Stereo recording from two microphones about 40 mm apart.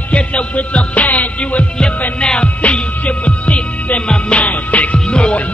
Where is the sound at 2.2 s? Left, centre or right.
Left.